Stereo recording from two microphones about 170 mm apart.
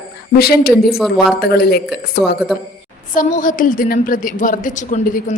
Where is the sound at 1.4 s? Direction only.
65° left (ahead or behind).